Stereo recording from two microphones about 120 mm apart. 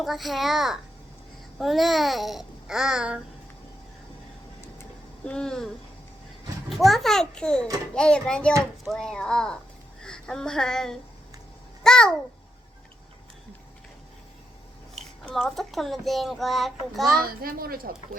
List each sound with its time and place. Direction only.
0.0 s a child's voice: centre (ahead or behind)
5.2 s speech: 5° left (ahead or behind)
6.7 s a child's voice: centre (ahead or behind)
15.2 s a child's voice: 5° left (ahead or behind)